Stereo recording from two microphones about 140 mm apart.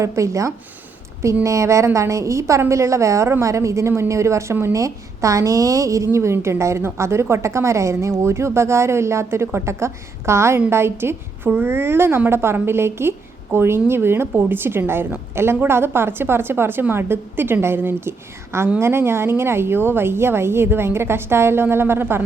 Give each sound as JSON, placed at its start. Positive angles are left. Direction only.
{"t": 0.0, "sound": "a woman's voice", "side_deg": -20}